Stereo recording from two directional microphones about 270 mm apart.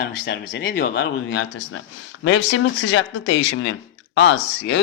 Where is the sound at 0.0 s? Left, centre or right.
Left.